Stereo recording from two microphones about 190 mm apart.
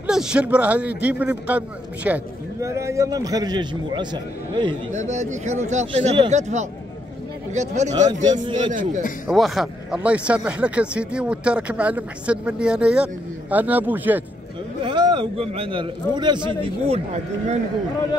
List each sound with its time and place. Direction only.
0.0 s a man's voice: 5° right (ahead or behind); by 4.7 s 25° right (ahead or behind)
4.9 s speech: 40° right (ahead or behind)
8.3 s a man's voice: 25° right (ahead or behind)
9.3 s speech: centre (ahead or behind)
14.8 s a man's voice: 25° right (ahead or behind)